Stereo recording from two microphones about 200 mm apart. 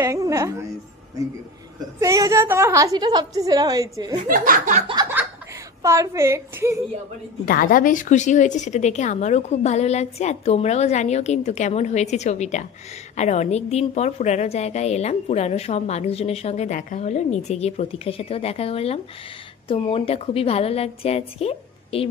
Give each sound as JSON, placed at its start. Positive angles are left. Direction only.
{"t": 0.0, "sound": "a woman's voice", "side_deg": -15}
{"t": 2.0, "sound": "a woman's voice", "side_deg": -15}
{"t": 4.2, "sound": "speech", "side_deg": -40}
{"t": 5.8, "sound": "a woman's voice", "side_deg": -15}
{"t": 7.4, "sound": "a woman's voice", "side_deg": 45}